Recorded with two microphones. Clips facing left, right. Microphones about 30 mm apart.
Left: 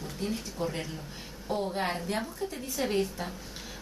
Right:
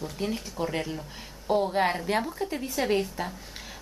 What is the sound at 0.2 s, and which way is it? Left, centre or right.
Speech, centre.